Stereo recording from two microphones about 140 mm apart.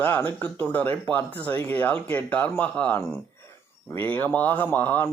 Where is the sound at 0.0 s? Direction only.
10° left (ahead or behind).